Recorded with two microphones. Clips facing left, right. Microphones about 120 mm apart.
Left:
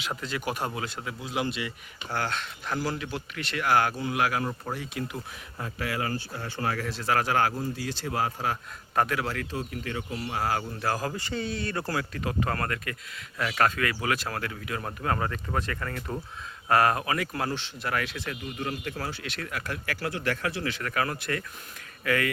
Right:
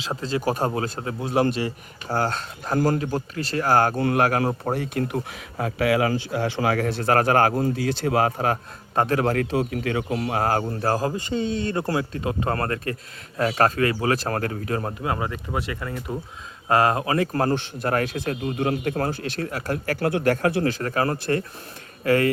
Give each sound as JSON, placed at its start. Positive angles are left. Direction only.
{"t": 0.0, "sound": "speech", "side_deg": -30}
{"t": 3.9, "sound": "speech", "side_deg": -55}
{"t": 9.0, "sound": "speech", "side_deg": -35}
{"t": 9.2, "sound": "speech", "side_deg": -55}
{"t": 11.3, "sound": "speech", "side_deg": -20}
{"t": 14.8, "sound": "speech", "side_deg": -15}
{"t": 16.6, "sound": "speech", "side_deg": -25}
{"t": 18.4, "sound": "speech", "side_deg": -65}
{"t": 19.2, "sound": "speech", "side_deg": -35}
{"t": 20.0, "sound": "speech", "side_deg": -55}
{"t": 20.7, "sound": "speech", "side_deg": -35}